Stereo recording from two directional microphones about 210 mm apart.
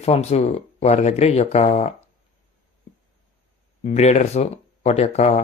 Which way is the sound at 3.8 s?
35° left (ahead or behind).